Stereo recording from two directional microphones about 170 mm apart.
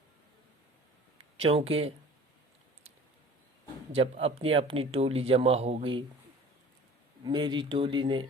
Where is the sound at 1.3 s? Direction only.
35° right (ahead or behind).